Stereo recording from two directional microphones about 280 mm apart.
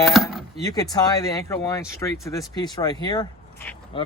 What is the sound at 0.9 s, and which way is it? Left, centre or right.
Speech, centre.